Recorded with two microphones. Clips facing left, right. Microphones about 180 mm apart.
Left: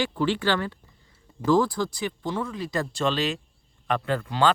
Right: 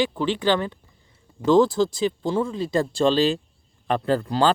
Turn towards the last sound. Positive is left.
turn(degrees=-35)  # may be behind; listen again after turning